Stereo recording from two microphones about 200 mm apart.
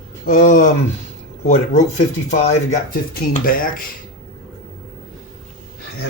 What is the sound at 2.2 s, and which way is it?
Speech, 35° left (ahead or behind).